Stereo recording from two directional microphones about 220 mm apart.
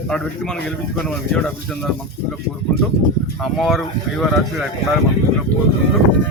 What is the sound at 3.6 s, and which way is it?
Speech, centre (ahead or behind).